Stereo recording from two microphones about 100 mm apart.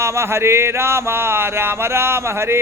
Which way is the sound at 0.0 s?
30° right (ahead or behind).